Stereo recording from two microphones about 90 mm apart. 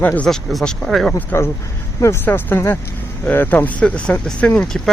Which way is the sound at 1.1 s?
30° left (ahead or behind).